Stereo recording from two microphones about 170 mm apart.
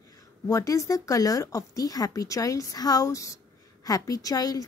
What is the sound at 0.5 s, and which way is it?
A woman's voice, 20° left (ahead or behind).